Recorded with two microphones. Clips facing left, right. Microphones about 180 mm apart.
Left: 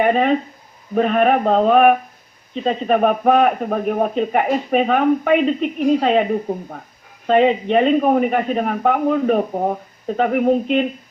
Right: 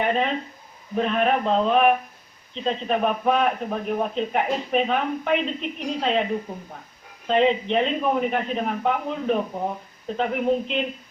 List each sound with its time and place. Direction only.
0.0 s a man's voice: 50° left (ahead or behind)